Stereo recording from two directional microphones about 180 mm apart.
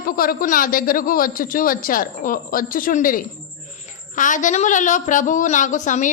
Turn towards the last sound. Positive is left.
turn(degrees=45)  # may be behind; listen again after turning